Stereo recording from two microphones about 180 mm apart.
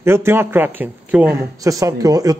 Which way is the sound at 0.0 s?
15° right (ahead or behind).